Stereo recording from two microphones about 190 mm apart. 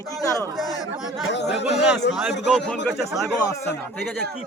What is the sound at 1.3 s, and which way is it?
Speech, 65° left (ahead or behind).